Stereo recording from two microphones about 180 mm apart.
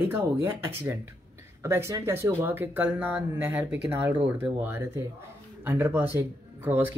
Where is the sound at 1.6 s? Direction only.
15° right (ahead or behind).